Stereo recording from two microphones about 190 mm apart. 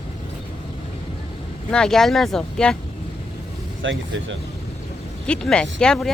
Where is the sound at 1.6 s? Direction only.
5° left (ahead or behind).